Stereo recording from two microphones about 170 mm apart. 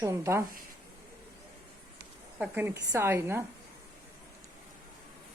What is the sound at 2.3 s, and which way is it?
A woman's voice, 10° right (ahead or behind).